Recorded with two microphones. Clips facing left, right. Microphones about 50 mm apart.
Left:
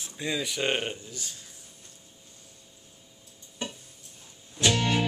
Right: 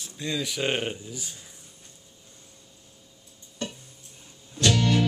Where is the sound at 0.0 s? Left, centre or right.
Centre.